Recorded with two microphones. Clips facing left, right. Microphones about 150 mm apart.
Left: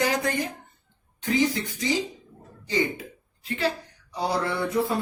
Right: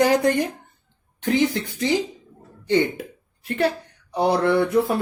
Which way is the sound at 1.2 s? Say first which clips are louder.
Right 3 dB; 65° right (ahead or behind).